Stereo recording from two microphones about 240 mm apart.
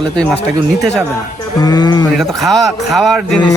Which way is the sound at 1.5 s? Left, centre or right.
Centre.